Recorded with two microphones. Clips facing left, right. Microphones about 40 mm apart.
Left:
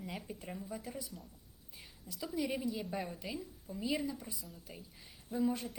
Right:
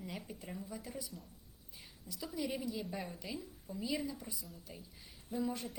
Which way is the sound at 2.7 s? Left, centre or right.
Centre.